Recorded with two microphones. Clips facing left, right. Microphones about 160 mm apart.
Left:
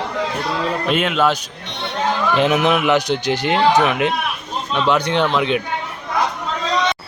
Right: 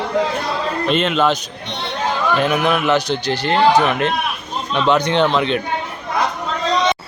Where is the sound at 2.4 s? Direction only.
20° left (ahead or behind).